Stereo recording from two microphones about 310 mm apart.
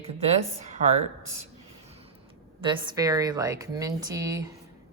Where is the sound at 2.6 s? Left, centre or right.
Centre.